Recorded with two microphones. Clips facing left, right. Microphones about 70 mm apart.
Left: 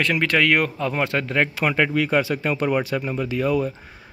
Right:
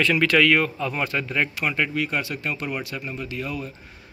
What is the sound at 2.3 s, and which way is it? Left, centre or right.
Speech, left.